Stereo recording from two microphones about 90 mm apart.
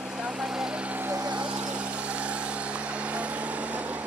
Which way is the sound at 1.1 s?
50° right (ahead or behind).